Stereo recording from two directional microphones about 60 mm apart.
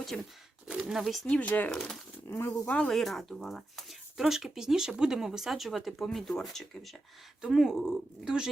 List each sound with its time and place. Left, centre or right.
0.1 s speech: centre
1.3 s speech: left
1.7 s speech: centre
2.2 s speech: left
2.8 s speech: centre
7.4 s speech: centre